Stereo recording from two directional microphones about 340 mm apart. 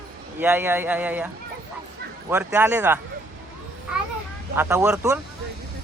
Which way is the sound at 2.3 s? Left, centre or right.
Centre.